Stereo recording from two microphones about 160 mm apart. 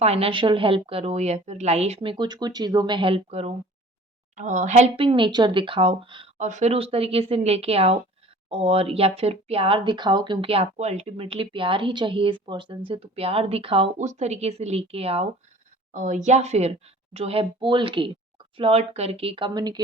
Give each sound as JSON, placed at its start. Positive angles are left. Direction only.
{"t": 0.0, "sound": "speech", "side_deg": -40}
{"t": 6.3, "sound": "speech", "side_deg": -50}
{"t": 15.9, "sound": "speech", "side_deg": -50}